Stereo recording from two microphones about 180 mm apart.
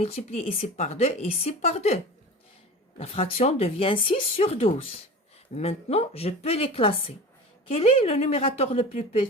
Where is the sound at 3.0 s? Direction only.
35° left (ahead or behind).